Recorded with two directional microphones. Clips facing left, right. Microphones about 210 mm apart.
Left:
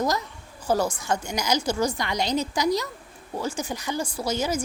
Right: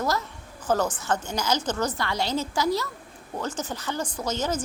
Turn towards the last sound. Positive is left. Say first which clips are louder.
# left 2 dB
turn(degrees=10)  # may be behind; listen again after turning